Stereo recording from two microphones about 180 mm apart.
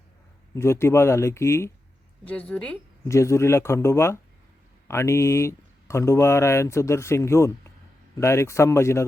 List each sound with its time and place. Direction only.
0.5 s speech: 15° left (ahead or behind)